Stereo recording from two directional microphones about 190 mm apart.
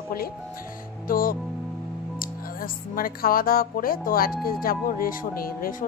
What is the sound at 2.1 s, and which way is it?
Speech, 50° left (ahead or behind).